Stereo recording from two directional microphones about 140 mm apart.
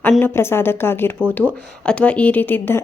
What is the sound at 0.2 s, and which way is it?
Speech, 15° left (ahead or behind).